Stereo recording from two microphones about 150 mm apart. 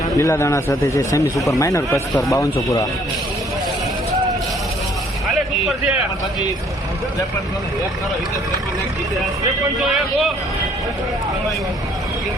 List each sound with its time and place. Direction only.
0.2 s speech: 20° left (ahead or behind)
5.6 s a man's voice: 5° right (ahead or behind)
9.8 s speech: centre (ahead or behind)